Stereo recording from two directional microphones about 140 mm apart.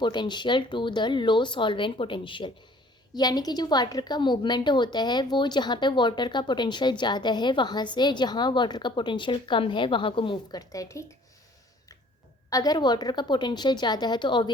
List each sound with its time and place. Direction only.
0.0 s a woman's voice: 30° left (ahead or behind)
12.5 s a woman's voice: 25° left (ahead or behind)